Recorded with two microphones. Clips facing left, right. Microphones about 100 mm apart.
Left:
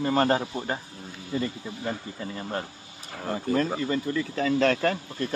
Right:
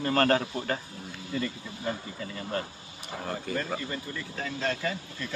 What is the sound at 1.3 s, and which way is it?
A man's voice, 30° left (ahead or behind).